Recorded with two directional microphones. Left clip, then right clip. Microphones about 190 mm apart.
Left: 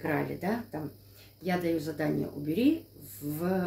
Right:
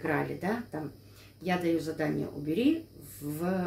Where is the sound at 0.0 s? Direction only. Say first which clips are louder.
Even; 5° right (ahead or behind).